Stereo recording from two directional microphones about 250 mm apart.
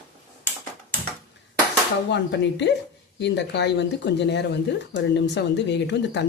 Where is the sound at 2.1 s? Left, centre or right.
Left.